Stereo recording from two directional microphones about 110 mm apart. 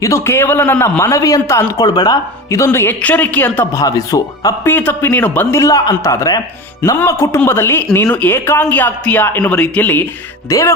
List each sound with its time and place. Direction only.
0.0 s a man's voice: 25° left (ahead or behind)
2.6 s speech: 20° left (ahead or behind)
3.7 s a man's voice: 30° left (ahead or behind)
4.6 s a man's voice: 20° left (ahead or behind)
10.5 s a man's voice: 30° left (ahead or behind)